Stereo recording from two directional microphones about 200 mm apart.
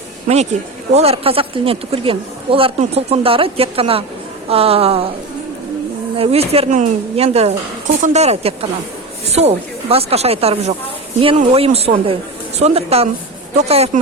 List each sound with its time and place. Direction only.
0.9 s speech: 30° right (ahead or behind)
6.1 s speech: 30° right (ahead or behind)